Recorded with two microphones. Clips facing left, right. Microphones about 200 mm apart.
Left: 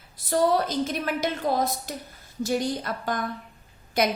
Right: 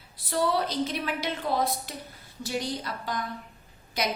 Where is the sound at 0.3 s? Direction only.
45° left (ahead or behind).